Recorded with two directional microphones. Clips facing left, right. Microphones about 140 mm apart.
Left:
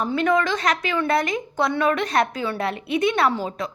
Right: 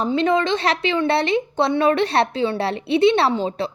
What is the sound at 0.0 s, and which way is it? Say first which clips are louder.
Speech: right 2 dB; 25° right (ahead or behind).